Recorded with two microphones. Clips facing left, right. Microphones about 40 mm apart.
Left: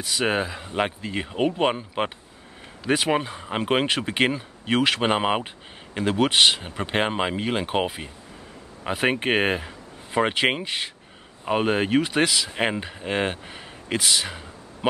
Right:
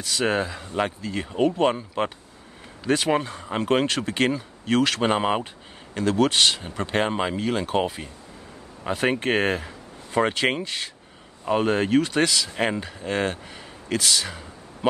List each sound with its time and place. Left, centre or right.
0.0 s speech: centre